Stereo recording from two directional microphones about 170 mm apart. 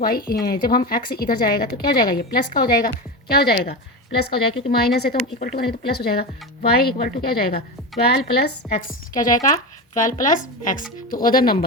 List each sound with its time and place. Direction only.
0.0 s a woman's voice: 60° left (ahead or behind)